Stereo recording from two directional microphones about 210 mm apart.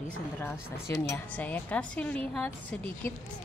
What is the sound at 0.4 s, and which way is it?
Speech, 10° left (ahead or behind).